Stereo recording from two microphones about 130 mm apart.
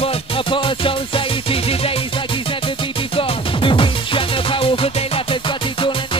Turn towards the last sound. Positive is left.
turn(degrees=40)  # may be behind; listen again after turning